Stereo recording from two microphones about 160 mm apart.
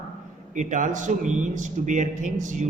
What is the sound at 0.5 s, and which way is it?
Speech, 50° right (ahead or behind).